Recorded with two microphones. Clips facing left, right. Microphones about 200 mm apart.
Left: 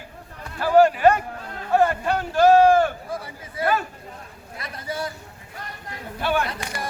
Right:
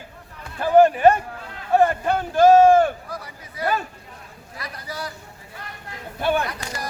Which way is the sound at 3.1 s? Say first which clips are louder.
Left 3 dB; 25° left (ahead or behind).